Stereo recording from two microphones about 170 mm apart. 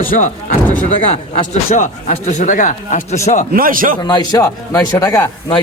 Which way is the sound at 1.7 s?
45° left (ahead or behind).